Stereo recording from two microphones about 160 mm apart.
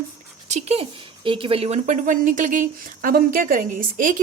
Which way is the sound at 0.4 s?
45° right (ahead or behind).